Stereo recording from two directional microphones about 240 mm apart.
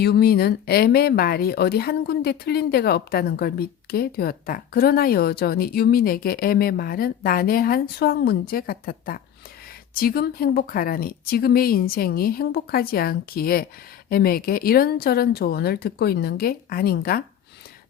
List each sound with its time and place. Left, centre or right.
0.0 s speech: left